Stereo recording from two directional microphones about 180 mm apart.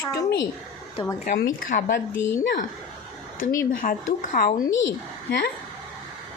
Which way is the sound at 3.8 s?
45° left (ahead or behind).